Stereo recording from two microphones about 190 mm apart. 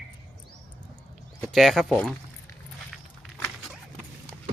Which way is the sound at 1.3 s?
Centre (ahead or behind).